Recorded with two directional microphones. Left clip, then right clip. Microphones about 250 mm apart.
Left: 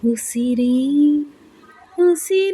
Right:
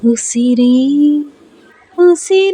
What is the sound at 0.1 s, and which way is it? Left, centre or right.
Female singing, centre.